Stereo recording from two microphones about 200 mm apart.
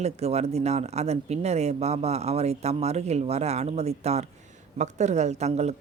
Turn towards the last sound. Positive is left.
turn(degrees=-35)  # may be behind; listen again after turning